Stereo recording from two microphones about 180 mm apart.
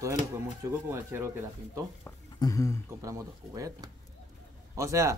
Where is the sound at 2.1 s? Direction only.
20° left (ahead or behind).